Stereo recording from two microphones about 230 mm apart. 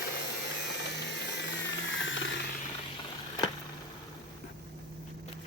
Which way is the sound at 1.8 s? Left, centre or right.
Left.